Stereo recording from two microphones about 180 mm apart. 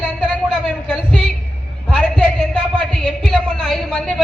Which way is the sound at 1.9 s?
5° left (ahead or behind).